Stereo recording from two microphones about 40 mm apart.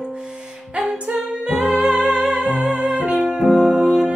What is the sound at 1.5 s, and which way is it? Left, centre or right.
Music, centre.